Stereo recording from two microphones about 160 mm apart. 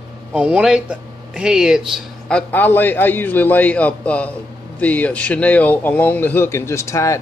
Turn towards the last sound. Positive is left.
turn(degrees=20)  # may be behind; listen again after turning